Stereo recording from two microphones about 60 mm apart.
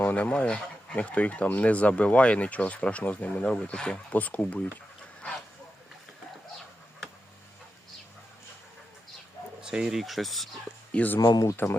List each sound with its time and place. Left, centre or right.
0.0 s speech: left
4.1 s speech: left
9.6 s a sound: centre
10.0 s speech: centre
10.9 s speech: left
11.2 s speech: left
11.5 s speech: left